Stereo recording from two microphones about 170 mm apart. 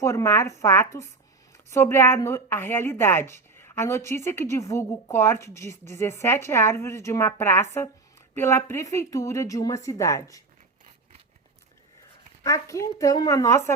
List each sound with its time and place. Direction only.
0.0 s a woman's voice: 15° left (ahead or behind)
12.4 s a woman's voice: 20° left (ahead or behind)